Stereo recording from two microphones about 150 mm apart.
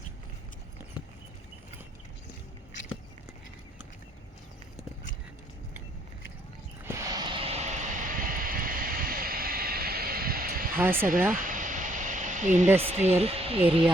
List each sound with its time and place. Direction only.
6.8 s vehicle: 25° right (ahead or behind); by 10.8 s 75° right (ahead or behind)
10.8 s speech: 15° right (ahead or behind)
11.3 s a sound: 65° right (ahead or behind)
12.8 s speech: 45° right (ahead or behind)